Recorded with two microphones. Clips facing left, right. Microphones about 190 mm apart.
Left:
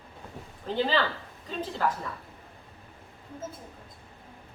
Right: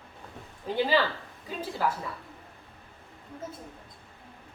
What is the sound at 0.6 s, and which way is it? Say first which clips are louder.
A woman's voice: right 1 dB; 10° right (ahead or behind).